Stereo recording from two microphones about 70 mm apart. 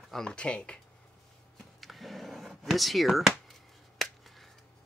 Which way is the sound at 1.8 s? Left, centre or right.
Centre.